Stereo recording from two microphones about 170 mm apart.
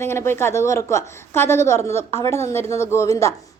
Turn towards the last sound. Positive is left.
turn(degrees=20)  # may be behind; listen again after turning